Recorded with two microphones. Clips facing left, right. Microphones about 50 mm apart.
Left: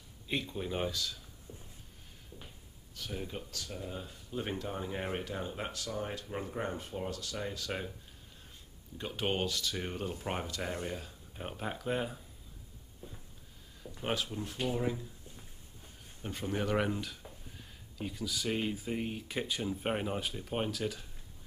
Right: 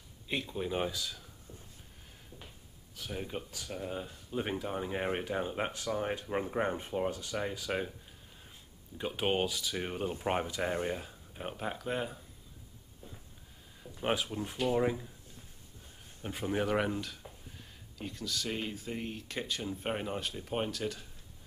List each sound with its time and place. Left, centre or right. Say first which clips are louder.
0.3 s speech: right 1 dB; centre
1.5 s a sound: left 2 dB; left
3.0 s speech: right 2 dB; centre
8.9 s speech: right 3 dB; centre
13.9 s speech: right 3 dB; centre
14.6 s speech: right 5 dB; right
16.2 s speech: right 2 dB; centre